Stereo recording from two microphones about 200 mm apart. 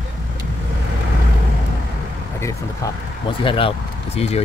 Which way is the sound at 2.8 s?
15° left (ahead or behind).